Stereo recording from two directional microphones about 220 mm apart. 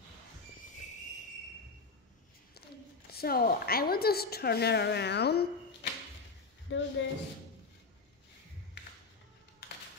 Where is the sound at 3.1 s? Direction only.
45° left (ahead or behind).